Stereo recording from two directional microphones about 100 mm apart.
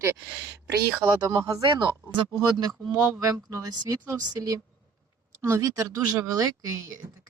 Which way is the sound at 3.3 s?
35° right (ahead or behind).